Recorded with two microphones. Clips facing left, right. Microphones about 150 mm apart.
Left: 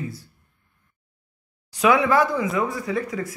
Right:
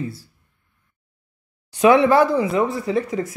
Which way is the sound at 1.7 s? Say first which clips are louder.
Right 5 dB; 30° right (ahead or behind).